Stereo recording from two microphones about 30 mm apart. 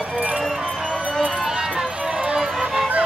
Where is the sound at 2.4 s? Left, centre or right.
Centre.